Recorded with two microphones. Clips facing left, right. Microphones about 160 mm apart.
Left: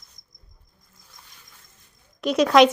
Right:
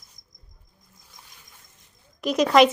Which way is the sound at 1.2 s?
15° right (ahead or behind).